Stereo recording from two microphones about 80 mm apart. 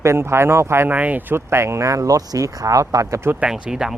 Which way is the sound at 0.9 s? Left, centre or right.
Centre.